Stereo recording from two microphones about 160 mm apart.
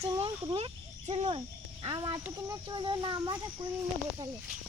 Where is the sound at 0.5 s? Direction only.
40° right (ahead or behind).